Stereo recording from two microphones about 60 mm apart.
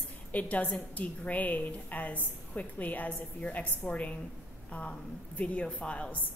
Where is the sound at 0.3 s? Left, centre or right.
Left.